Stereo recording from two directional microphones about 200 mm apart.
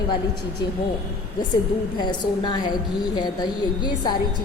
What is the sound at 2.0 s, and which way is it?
A woman's voice, 20° left (ahead or behind).